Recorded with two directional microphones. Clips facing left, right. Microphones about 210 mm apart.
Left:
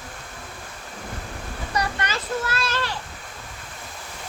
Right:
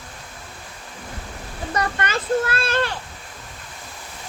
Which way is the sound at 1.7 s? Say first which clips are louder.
Right 3 dB; 55° right (ahead or behind).